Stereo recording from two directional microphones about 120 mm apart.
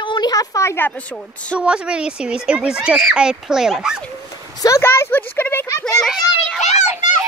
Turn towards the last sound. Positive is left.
turn(degrees=80)